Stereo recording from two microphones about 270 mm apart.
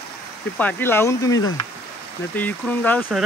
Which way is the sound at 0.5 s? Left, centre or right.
Centre.